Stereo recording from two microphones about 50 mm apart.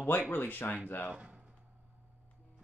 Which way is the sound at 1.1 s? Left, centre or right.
Right.